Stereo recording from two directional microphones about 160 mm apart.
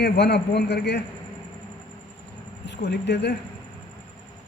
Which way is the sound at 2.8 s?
90° left.